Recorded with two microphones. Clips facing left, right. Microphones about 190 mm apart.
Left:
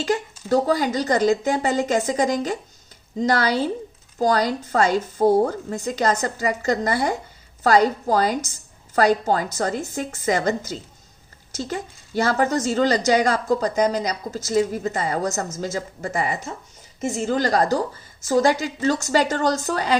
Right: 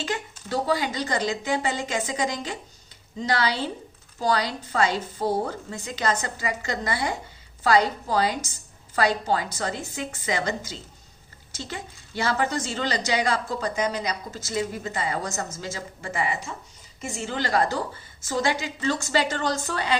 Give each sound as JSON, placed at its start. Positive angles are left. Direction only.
{"t": 0.0, "sound": "a woman's voice", "side_deg": 40}